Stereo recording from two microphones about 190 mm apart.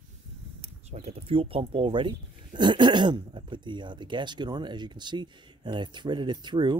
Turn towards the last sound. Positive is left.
turn(degrees=-25)  # may be behind; listen again after turning